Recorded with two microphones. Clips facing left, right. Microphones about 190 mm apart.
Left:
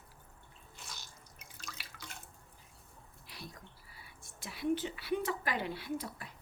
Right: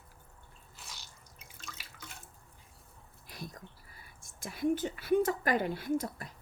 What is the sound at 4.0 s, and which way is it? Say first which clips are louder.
Speech: right 4 dB; 45° right (ahead or behind).